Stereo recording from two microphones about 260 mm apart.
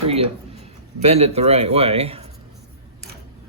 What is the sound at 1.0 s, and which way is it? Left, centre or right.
Speech, right.